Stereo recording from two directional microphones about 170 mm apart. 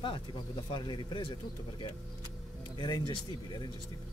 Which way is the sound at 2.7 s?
25° left (ahead or behind).